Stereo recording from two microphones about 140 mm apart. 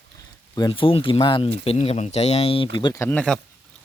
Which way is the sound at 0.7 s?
40° left (ahead or behind).